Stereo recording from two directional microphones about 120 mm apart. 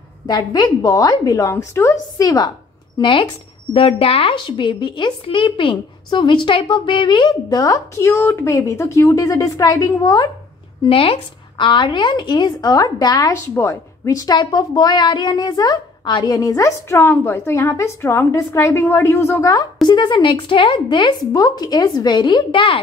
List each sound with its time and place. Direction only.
0.3 s a woman's voice: 35° left (ahead or behind)
2.2 s a woman's voice: 35° left (ahead or behind)
3.0 s a woman's voice: 45° left (ahead or behind)
10.8 s a woman's voice: 50° left (ahead or behind); by 19.4 s 20° left (ahead or behind)
19.9 s a woman's voice: 40° left (ahead or behind)